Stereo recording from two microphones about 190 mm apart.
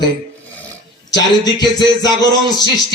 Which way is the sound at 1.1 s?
20° left (ahead or behind).